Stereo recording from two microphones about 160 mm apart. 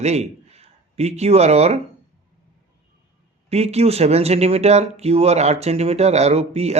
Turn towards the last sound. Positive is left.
turn(degrees=-40)  # may be behind; listen again after turning